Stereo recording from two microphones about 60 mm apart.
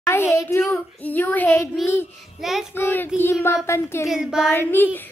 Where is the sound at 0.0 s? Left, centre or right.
Left.